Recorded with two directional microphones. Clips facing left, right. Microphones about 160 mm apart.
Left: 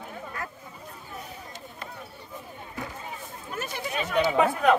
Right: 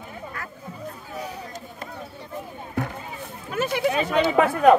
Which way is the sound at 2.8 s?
65° right (ahead or behind).